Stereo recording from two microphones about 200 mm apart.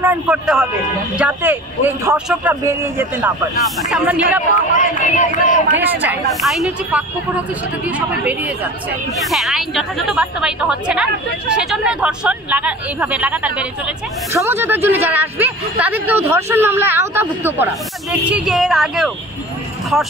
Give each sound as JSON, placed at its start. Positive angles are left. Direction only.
{"t": 0.0, "sound": "a woman's voice", "side_deg": -5}
{"t": 4.7, "sound": "speech", "side_deg": 40}
{"t": 5.8, "sound": "a woman's voice", "side_deg": -10}
{"t": 8.1, "sound": "a woman's voice", "side_deg": -5}